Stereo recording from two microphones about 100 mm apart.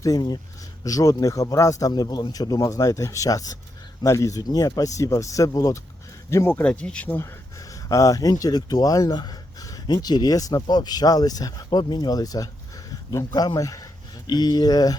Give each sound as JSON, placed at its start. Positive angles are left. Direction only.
{"t": 0.9, "sound": "speech", "side_deg": 35}
{"t": 6.6, "sound": "speech", "side_deg": 10}
{"t": 7.9, "sound": "speech", "side_deg": 35}